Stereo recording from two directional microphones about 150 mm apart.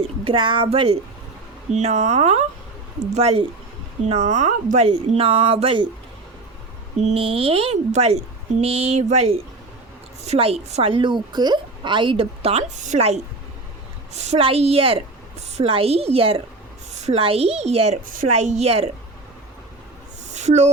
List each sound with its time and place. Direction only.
0.3 s a woman's voice: 35° right (ahead or behind)
1.7 s a woman's voice: 50° right (ahead or behind)
4.9 s a woman's voice: 40° right (ahead or behind)
7.0 s a woman's voice: 40° right (ahead or behind)
16.9 s a woman's voice: 50° right (ahead or behind)
20.3 s a sound: 50° right (ahead or behind)